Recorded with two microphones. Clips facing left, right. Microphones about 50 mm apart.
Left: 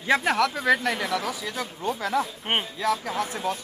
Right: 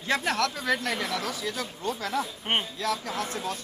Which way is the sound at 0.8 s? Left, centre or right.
Left.